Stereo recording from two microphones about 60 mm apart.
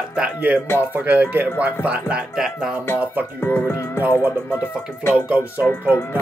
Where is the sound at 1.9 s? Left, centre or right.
Centre.